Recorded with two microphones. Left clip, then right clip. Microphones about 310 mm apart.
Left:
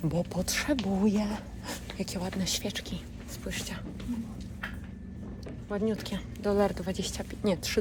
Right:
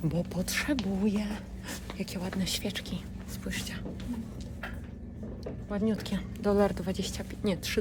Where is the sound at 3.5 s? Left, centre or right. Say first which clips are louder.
Even; centre.